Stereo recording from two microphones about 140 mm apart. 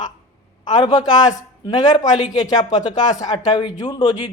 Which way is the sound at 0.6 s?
30° left (ahead or behind).